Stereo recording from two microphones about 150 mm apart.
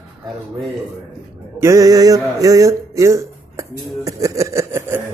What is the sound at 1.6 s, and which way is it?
Speech, 20° right (ahead or behind).